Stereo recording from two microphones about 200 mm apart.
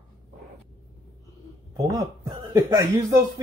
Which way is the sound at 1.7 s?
15° right (ahead or behind).